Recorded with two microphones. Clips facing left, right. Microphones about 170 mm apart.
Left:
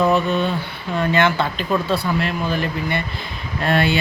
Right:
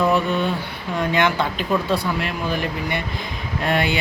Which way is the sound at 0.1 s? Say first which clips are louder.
Left 1 dB; 10° right (ahead or behind).